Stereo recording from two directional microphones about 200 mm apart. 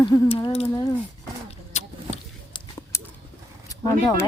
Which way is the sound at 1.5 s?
30° left (ahead or behind).